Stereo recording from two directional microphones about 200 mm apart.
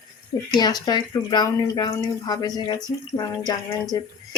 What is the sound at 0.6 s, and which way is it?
Speech, 20° left (ahead or behind).